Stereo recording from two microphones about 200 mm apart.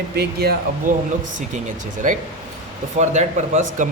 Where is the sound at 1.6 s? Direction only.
40° right (ahead or behind).